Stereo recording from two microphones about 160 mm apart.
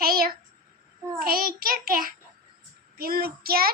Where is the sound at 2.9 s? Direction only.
70° right (ahead or behind).